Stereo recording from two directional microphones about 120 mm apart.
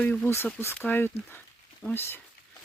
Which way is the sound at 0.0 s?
15° left (ahead or behind).